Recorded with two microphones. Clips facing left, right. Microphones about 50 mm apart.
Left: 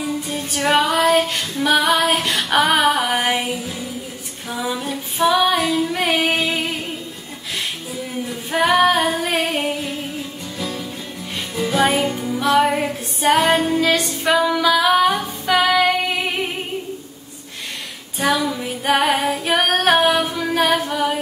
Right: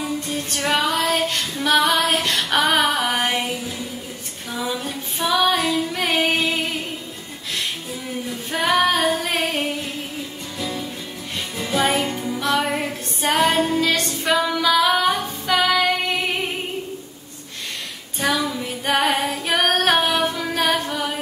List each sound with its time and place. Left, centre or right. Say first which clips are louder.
0.3 s music: left 5 dB; centre
4.5 s female singing: left 2 dB; centre
8.3 s female singing: left 4 dB; centre
10.6 s music: even; centre
18.5 s female singing: left 3 dB; centre